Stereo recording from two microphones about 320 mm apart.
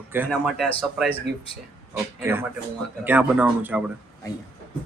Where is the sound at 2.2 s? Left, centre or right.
Centre.